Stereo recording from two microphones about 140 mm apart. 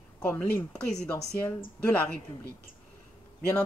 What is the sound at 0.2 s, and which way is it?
Speech, 10° left (ahead or behind).